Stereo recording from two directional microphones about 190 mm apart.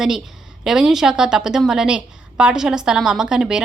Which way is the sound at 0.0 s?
Centre (ahead or behind).